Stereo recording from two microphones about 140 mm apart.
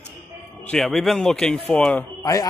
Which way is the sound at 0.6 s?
Centre (ahead or behind).